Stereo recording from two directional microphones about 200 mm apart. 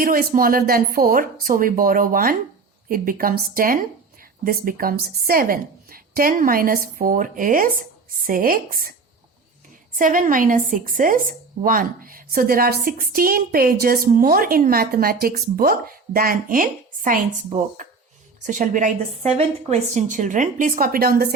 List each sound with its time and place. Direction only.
0.0 s speech: 45° right (ahead or behind)
10.0 s a woman's voice: 40° right (ahead or behind)